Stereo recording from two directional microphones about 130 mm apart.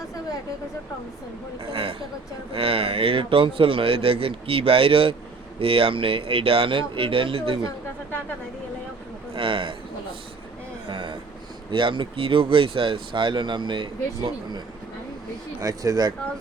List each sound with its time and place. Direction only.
1.7 s a man's voice: 45° right (ahead or behind)
9.3 s a man's voice: 40° right (ahead or behind)
10.8 s vehicle: 40° right (ahead or behind)
11.7 s speech: 40° right (ahead or behind)
15.6 s speech: 30° right (ahead or behind)